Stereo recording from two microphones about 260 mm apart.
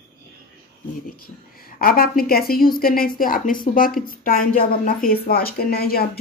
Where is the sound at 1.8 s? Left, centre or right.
Left.